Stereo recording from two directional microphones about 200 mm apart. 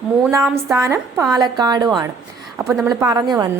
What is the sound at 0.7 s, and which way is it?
A woman's voice, 15° right (ahead or behind).